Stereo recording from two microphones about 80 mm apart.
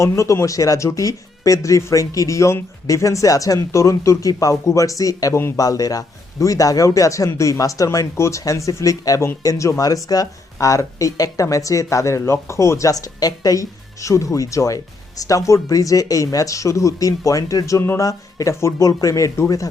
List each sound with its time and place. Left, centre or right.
0.0 s speech: left